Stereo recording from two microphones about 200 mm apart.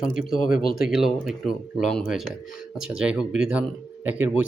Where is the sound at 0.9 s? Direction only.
Centre (ahead or behind).